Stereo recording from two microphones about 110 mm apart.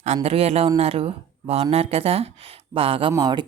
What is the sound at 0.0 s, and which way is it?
A man's voice, 85° right.